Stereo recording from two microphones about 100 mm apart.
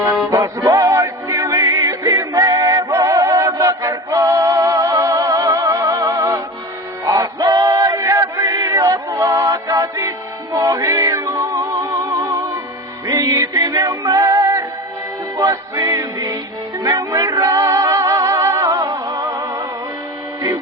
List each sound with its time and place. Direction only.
0.3 s music: 35° right (ahead or behind)
13.1 s music: 35° right (ahead or behind)